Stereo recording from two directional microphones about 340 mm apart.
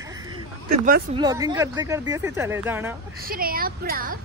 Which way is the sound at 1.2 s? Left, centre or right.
Centre.